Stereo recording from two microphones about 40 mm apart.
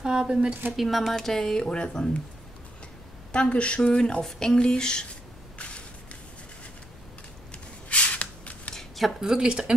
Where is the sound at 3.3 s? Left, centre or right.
Left.